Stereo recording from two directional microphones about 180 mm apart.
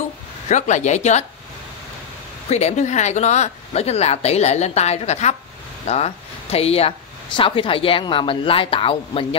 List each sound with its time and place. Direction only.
0.5 s speech: 40° left (ahead or behind)
2.5 s speech: 40° left (ahead or behind)